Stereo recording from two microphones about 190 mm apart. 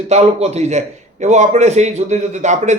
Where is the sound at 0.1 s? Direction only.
35° right (ahead or behind).